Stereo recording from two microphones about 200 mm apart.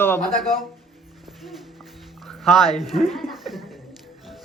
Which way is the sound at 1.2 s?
Centre (ahead or behind).